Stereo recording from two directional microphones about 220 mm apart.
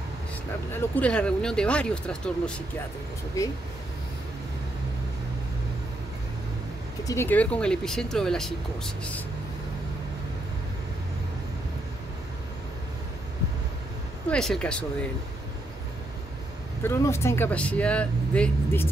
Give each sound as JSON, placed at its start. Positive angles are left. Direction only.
{"t": 0.7, "sound": "speech", "side_deg": 5}
{"t": 7.1, "sound": "speech", "side_deg": 10}
{"t": 14.3, "sound": "speech", "side_deg": 5}
{"t": 16.8, "sound": "speech", "side_deg": 10}